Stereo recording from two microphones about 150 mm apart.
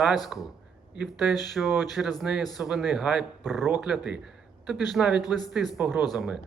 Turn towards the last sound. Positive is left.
turn(degrees=0)  # may be behind; listen again after turning